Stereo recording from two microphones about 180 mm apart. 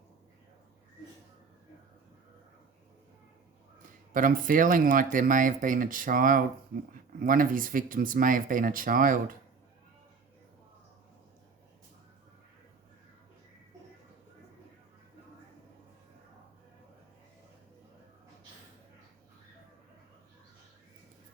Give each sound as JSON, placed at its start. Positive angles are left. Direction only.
{"t": 4.1, "sound": "speech", "side_deg": -50}